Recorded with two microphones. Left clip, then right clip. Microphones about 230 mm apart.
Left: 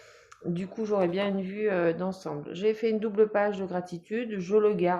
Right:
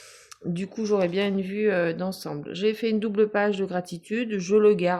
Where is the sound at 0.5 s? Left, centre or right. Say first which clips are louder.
Right 3 dB; right.